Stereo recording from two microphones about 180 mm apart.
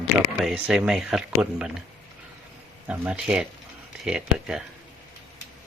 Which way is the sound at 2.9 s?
5° right (ahead or behind).